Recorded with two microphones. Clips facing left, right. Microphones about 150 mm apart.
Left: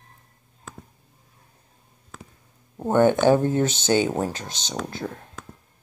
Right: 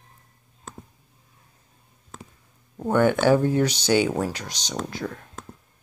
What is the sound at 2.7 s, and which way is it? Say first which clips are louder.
Speech: left 2 dB; 20° left (ahead or behind).